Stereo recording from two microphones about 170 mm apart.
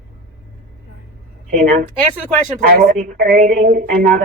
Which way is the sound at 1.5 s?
45° right (ahead or behind).